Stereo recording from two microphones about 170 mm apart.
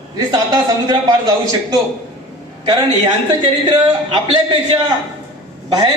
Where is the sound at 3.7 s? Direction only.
30° right (ahead or behind).